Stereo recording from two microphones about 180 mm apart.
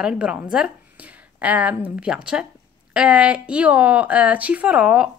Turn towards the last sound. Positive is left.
turn(degrees=-5)  # may be behind; listen again after turning